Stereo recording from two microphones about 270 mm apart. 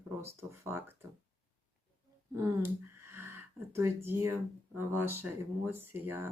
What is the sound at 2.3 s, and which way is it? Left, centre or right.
Speech, centre.